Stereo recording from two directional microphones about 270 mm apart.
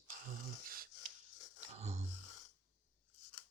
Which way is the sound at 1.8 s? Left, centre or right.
Right.